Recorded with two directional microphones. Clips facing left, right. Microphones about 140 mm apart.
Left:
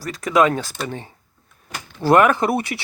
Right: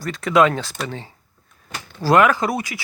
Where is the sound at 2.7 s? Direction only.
45° left (ahead or behind).